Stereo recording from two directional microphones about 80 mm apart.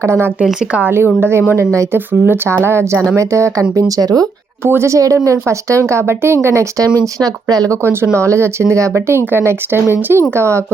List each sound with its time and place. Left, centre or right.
0.0 s speech: right
2.2 s speech: right
4.6 s speech: right
7.0 s speech: right
8.2 s speech: right